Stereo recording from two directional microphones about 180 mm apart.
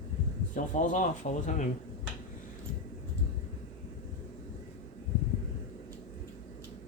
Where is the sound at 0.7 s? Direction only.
45° left (ahead or behind).